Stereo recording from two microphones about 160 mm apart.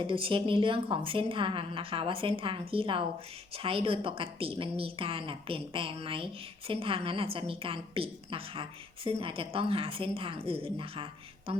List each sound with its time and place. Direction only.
0.1 s a woman's voice: 35° right (ahead or behind)